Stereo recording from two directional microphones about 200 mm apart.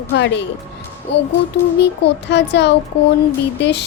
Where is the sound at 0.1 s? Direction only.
60° left (ahead or behind).